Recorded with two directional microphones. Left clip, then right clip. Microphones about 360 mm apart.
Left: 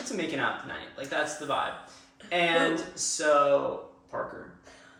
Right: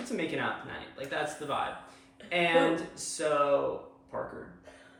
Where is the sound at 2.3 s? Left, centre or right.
Centre.